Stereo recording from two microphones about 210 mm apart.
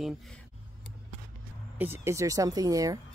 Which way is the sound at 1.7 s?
10° right (ahead or behind).